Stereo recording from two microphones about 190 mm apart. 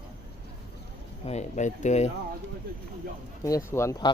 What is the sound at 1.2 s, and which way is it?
Speech, 35° left (ahead or behind).